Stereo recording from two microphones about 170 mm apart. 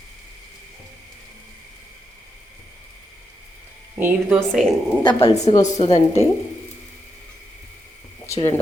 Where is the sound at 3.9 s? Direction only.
10° right (ahead or behind).